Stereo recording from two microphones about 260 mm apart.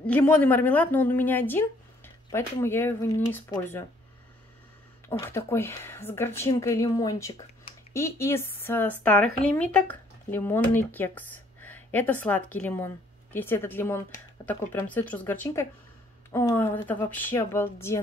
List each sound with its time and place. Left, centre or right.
0.0 s a woman's voice: centre
5.2 s a woman's voice: centre